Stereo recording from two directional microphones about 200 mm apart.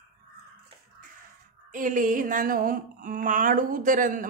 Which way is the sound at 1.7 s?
40° right (ahead or behind).